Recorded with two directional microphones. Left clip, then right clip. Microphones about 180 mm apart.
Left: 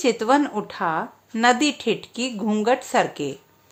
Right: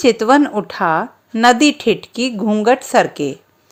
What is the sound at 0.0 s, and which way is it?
Speech, 30° right (ahead or behind).